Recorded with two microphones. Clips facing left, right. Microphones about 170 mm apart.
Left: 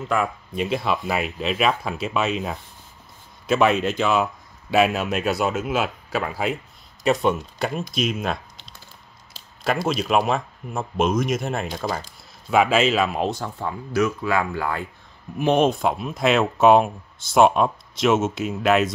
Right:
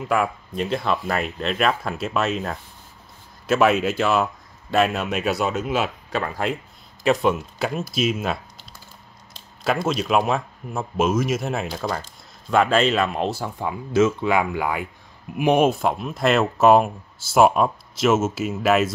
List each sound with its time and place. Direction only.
0.1 s speech: centre (ahead or behind)
9.7 s speech: centre (ahead or behind)
13.4 s speech: 10° right (ahead or behind)
13.9 s speech: 20° right (ahead or behind); by 18.9 s 5° right (ahead or behind)